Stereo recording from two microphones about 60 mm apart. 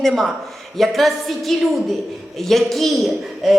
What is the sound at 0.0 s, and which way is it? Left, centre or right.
A woman's voice, centre.